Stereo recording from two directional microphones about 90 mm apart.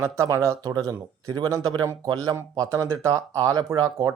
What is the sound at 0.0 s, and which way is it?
Speech, 30° right (ahead or behind).